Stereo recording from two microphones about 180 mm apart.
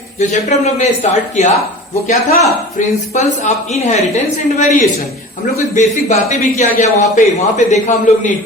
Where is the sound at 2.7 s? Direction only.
40° left (ahead or behind).